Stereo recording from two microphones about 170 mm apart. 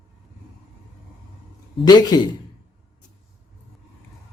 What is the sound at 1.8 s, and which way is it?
Speech, 25° left (ahead or behind).